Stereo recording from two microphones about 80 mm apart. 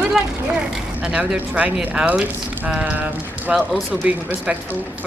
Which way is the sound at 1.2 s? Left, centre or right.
Centre.